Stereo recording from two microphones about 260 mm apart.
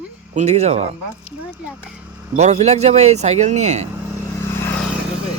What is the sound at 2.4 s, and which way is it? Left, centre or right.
Speech, right.